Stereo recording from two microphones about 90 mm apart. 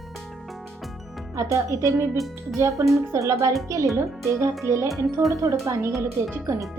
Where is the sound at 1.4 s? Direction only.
35° right (ahead or behind).